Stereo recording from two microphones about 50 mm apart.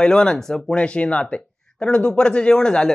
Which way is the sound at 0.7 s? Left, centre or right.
Left.